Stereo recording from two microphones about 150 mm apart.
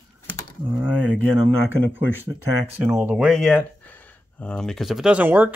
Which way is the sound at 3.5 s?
10° left (ahead or behind).